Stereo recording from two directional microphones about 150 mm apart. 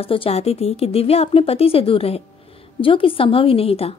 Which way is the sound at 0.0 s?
40° left (ahead or behind).